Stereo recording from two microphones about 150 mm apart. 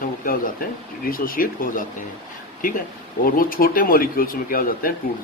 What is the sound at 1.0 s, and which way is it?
Speech, 70° left (ahead or behind).